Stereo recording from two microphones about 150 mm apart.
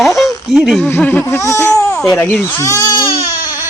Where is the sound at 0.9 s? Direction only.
10° left (ahead or behind).